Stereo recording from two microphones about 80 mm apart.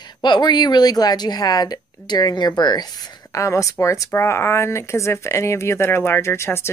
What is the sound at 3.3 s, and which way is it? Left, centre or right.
Speech, left.